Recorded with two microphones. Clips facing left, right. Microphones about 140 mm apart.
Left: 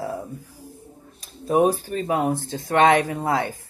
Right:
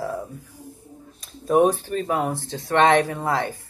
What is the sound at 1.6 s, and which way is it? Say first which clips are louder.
Speech: even; 40° left (ahead or behind).